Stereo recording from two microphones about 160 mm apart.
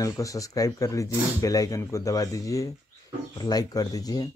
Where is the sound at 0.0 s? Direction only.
20° left (ahead or behind).